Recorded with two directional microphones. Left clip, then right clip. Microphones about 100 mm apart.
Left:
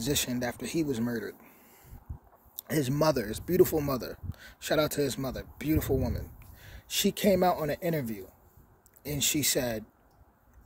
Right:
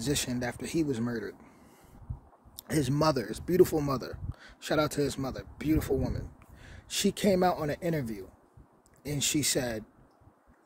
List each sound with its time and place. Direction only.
0.0 s speech: 40° right (ahead or behind)